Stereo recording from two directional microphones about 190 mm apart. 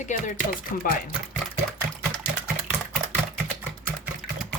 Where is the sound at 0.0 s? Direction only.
40° left (ahead or behind).